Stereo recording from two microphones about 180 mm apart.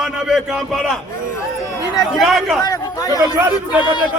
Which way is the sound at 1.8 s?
20° left (ahead or behind).